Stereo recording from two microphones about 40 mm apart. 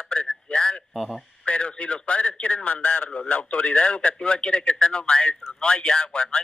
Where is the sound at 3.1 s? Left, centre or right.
Left.